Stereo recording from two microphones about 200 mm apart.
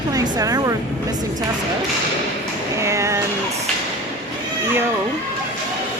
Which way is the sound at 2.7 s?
15° right (ahead or behind).